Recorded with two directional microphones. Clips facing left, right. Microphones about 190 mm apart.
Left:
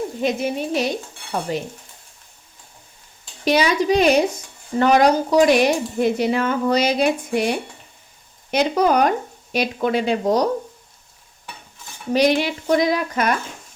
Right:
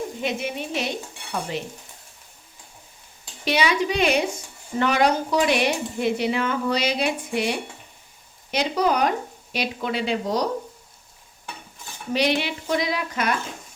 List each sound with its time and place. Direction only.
0.2 s stir: 40° left (ahead or behind)
3.4 s stir: 40° left (ahead or behind)
4.8 s speech: 40° left (ahead or behind)
12.1 s speech: 45° left (ahead or behind)